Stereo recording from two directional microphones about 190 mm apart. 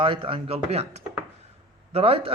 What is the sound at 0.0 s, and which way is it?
Speech, 25° right (ahead or behind).